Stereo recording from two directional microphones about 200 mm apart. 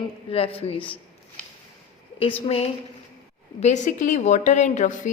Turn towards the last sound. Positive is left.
turn(degrees=40)  # may be behind; listen again after turning